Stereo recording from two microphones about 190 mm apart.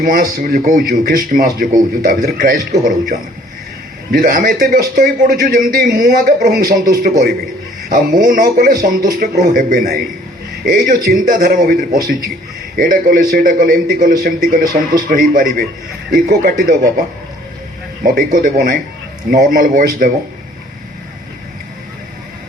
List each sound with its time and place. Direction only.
0.0 s a man's voice: 50° right (ahead or behind)
4.1 s a man's voice: 50° right (ahead or behind)
18.0 s a man's voice: 50° right (ahead or behind)